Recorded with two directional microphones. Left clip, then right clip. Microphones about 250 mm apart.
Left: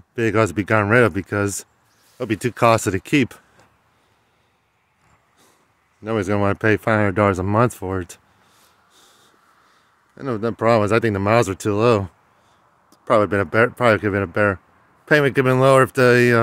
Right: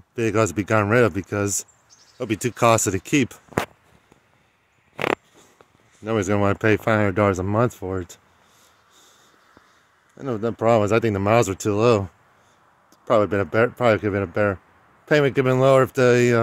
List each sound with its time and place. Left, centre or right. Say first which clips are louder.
0.1 s speech: left 2 dB; centre
6.0 s speech: left 1 dB; centre
10.1 s speech: left 2 dB; centre